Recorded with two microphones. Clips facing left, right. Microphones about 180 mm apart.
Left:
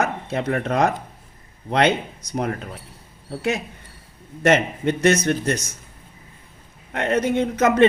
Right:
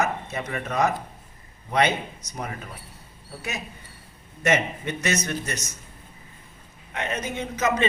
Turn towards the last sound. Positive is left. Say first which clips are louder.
# left 8 dB
turn(degrees=55)  # may be behind; listen again after turning